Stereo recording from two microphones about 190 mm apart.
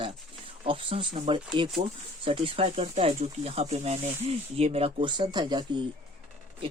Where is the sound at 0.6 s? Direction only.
25° right (ahead or behind).